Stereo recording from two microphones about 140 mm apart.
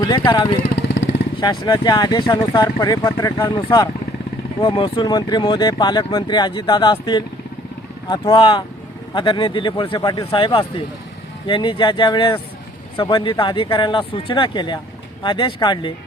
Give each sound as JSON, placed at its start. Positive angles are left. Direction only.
{"t": 0.0, "sound": "speech", "side_deg": 30}